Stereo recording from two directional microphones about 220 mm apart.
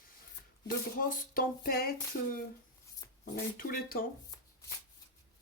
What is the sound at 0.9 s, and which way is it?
Speech, 40° left (ahead or behind).